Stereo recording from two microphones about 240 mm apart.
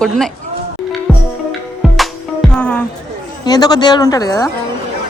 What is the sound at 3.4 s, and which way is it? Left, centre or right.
Speech, centre.